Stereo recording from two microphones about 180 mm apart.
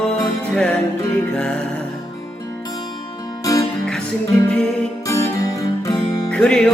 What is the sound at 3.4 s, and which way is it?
Music, 20° left (ahead or behind).